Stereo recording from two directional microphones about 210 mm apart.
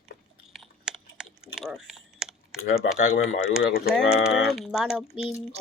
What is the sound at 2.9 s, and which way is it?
Speech, 35° left (ahead or behind).